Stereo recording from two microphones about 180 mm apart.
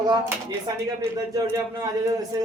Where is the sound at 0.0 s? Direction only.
20° right (ahead or behind).